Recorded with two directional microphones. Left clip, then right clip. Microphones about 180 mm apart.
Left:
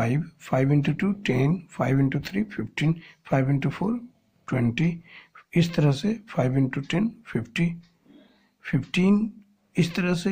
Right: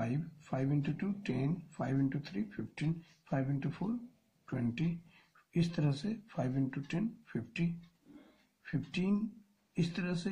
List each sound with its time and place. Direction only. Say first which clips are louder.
0.0 s speech: left 12 dB; 35° left (ahead or behind)